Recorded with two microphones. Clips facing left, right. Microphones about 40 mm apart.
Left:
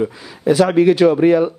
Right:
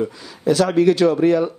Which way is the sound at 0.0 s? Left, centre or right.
Centre.